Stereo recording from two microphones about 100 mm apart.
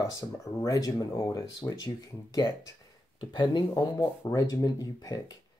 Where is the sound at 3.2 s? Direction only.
50° left (ahead or behind).